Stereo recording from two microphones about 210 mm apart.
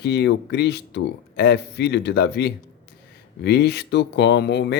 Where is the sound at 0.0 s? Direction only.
50° left (ahead or behind).